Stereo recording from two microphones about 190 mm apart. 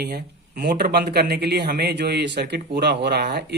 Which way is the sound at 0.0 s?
60° right (ahead or behind).